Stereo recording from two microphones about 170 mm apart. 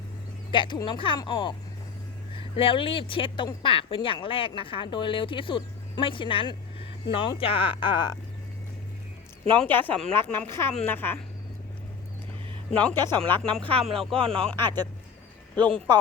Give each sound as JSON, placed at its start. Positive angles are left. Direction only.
{"t": 0.5, "sound": "speech", "side_deg": 30}
{"t": 9.6, "sound": "speech", "side_deg": 10}
{"t": 12.7, "sound": "speech", "side_deg": 10}